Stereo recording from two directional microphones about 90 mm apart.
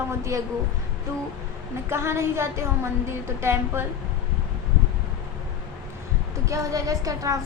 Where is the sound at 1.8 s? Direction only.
30° right (ahead or behind).